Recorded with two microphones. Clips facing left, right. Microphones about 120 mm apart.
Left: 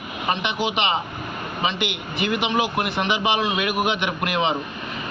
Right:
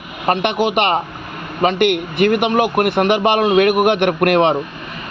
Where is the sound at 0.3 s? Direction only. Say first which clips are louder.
Right 8 dB; 60° right (ahead or behind).